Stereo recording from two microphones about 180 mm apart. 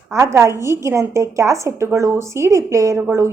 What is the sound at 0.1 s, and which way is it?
Speech, 15° right (ahead or behind).